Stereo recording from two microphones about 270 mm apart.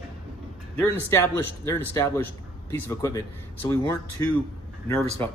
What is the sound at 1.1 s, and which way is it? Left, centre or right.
Speech, centre.